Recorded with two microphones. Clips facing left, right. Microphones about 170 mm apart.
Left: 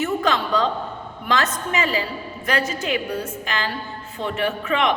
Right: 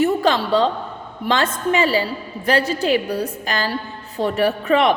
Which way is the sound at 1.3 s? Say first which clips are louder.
Right 4 dB; 30° right (ahead or behind).